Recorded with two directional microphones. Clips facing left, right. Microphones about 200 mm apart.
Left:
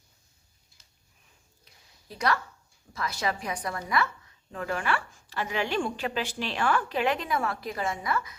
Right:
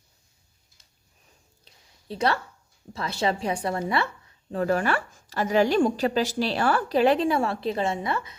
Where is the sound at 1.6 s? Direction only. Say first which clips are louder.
Right 2 dB; 30° right (ahead or behind).